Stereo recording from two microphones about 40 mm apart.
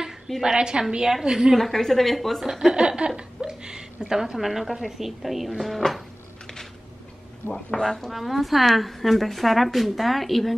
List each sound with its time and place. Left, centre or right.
0.4 s a woman's voice: centre
1.5 s a woman's voice: centre
2.7 s a woman's voice: right
3.2 s a sound: right
4.1 s a woman's voice: centre
7.4 s speech: left
7.8 s a woman's voice: centre